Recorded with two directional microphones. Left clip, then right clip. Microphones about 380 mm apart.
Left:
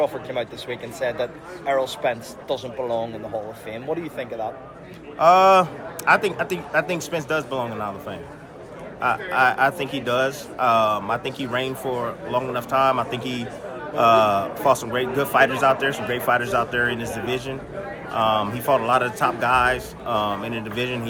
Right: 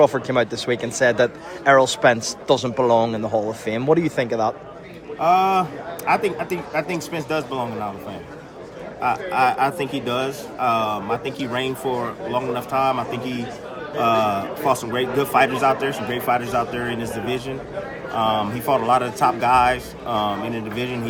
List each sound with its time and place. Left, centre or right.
0.0 s a man's voice: right
2.8 s a man's voice: right
3.7 s a man's voice: right
5.2 s speech: centre
9.0 s speech: centre
18.2 s speech: centre